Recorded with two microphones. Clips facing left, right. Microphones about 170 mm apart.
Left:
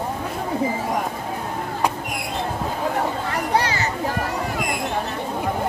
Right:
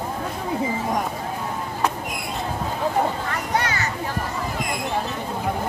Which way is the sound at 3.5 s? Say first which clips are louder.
Left 2 dB; 30° left (ahead or behind).